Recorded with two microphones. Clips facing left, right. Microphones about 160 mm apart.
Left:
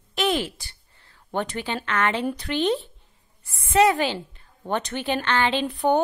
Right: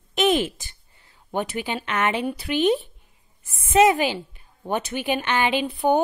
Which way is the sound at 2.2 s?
10° right (ahead or behind).